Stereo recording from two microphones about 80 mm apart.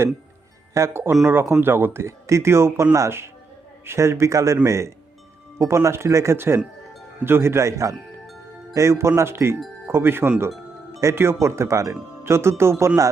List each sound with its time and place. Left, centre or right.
0.7 s speech: right